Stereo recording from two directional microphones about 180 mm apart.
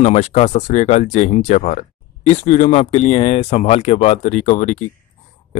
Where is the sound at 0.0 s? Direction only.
35° left (ahead or behind).